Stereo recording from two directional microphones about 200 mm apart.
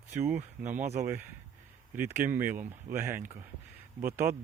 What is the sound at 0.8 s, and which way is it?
Speech, 35° right (ahead or behind).